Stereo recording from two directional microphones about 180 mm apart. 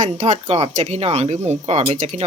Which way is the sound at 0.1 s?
35° right (ahead or behind).